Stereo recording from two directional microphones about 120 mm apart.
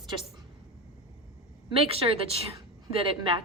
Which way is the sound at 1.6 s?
50° right (ahead or behind).